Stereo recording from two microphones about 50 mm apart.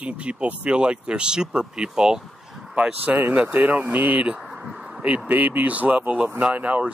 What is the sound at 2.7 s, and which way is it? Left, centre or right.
Speech, right.